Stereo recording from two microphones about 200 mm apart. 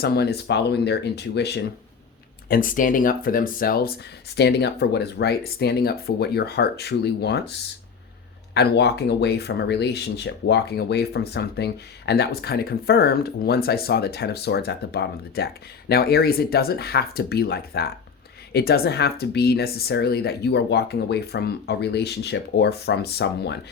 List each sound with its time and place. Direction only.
0.0 s speech: 55° left (ahead or behind)
2.5 s speech: 45° left (ahead or behind)